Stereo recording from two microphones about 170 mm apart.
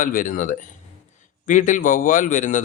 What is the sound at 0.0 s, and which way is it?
A man's voice, 55° left (ahead or behind).